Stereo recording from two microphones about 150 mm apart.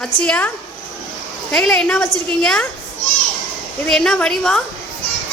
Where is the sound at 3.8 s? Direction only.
Centre (ahead or behind).